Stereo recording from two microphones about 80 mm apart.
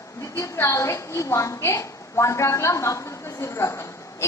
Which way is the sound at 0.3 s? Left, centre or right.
Left.